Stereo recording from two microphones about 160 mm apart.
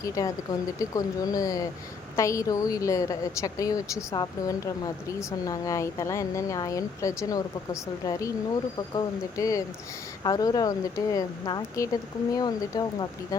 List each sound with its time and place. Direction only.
0.0 s a woman's voice: 20° left (ahead or behind)